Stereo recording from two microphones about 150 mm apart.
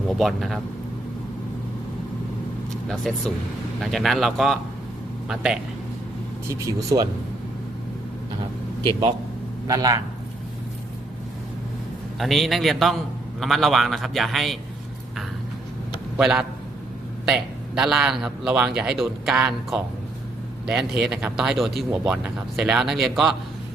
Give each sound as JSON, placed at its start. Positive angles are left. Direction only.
{"t": 0.2, "sound": "speech", "side_deg": 0}
{"t": 2.9, "sound": "speech", "side_deg": 5}
{"t": 6.5, "sound": "speech", "side_deg": -20}
{"t": 8.8, "sound": "speech", "side_deg": -30}
{"t": 12.2, "sound": "speech", "side_deg": 0}
{"t": 16.1, "sound": "a man's voice", "side_deg": -5}
{"t": 21.0, "sound": "speech", "side_deg": -5}